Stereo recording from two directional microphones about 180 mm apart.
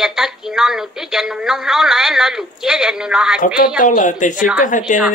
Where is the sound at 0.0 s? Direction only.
Centre (ahead or behind).